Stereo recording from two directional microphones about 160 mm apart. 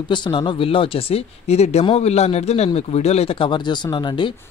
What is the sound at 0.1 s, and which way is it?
Speech, 30° left (ahead or behind).